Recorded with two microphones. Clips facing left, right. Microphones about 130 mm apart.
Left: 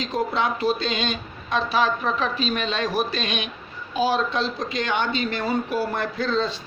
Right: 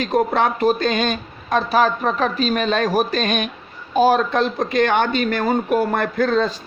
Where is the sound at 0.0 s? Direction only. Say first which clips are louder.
Right 6 dB; 55° right (ahead or behind).